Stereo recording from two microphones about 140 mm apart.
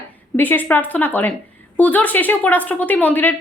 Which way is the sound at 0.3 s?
15° left (ahead or behind).